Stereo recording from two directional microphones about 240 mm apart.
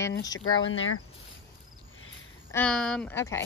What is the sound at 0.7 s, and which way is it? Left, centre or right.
Speech, left.